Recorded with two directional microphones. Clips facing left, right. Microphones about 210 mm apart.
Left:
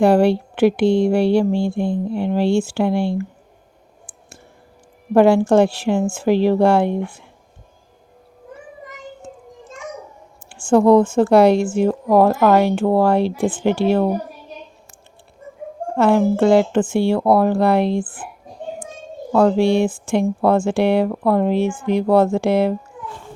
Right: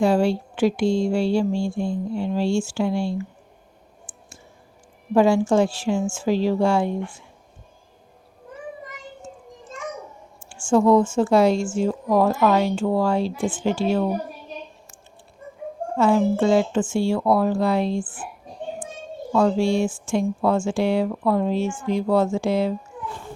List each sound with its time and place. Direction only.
0.0 s a woman's voice: 60° left (ahead or behind)
5.1 s a woman's voice: 60° left (ahead or behind)
10.5 s a woman's voice: 60° left (ahead or behind)
16.0 s a woman's voice: 60° left (ahead or behind)
19.3 s a woman's voice: 60° left (ahead or behind)